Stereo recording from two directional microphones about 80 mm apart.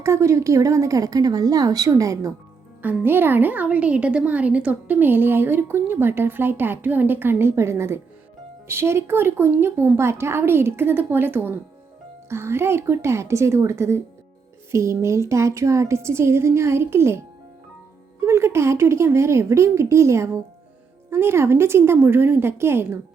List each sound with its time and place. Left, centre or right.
0.0 s speech: right
2.8 s a woman's voice: right